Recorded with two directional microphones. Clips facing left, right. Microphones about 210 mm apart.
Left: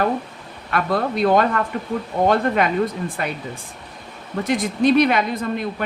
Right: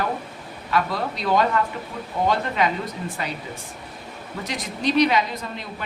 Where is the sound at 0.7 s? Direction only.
55° left (ahead or behind).